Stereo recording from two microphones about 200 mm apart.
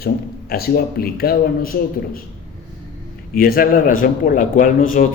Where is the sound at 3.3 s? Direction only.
45° left (ahead or behind).